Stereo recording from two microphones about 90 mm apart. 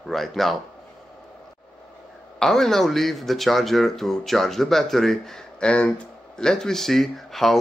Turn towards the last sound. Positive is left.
turn(degrees=0)  # may be behind; listen again after turning